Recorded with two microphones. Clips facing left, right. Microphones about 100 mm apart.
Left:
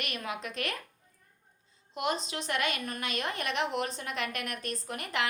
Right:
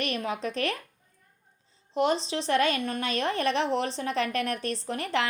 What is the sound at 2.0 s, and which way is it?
A woman's voice, 30° right (ahead or behind).